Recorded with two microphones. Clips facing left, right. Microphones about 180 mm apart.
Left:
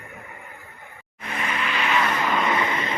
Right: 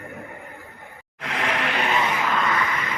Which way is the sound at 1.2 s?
85° right.